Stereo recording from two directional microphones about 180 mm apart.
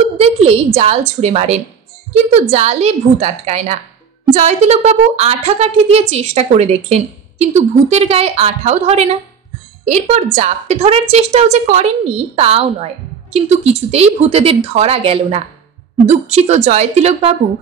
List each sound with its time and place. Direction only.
0.2 s a woman's voice: 35° right (ahead or behind)